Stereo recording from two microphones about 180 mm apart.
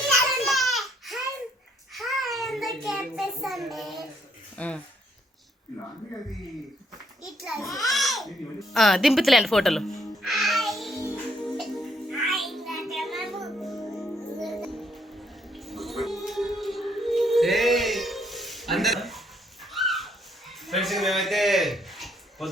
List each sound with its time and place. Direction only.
0.1 s a sound: centre (ahead or behind)
1.9 s child singing: centre (ahead or behind)
4.5 s speech: 5° left (ahead or behind)
7.6 s a child's voice: 20° left (ahead or behind)
7.9 s speech: centre (ahead or behind)
11.4 s music: centre (ahead or behind)
19.7 s dog: centre (ahead or behind)
20.7 s a sound: centre (ahead or behind)